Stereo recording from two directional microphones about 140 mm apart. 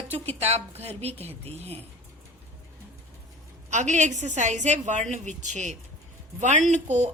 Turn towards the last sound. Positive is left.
turn(degrees=-55)  # may be behind; listen again after turning